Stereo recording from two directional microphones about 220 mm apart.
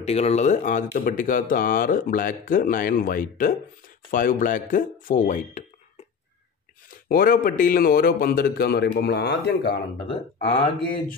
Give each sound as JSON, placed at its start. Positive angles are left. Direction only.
{"t": 0.0, "sound": "speech", "side_deg": 30}
{"t": 7.1, "sound": "a man's voice", "side_deg": 40}
{"t": 10.0, "sound": "speech", "side_deg": 25}